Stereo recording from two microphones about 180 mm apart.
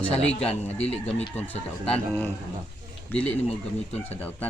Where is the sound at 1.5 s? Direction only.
10° left (ahead or behind).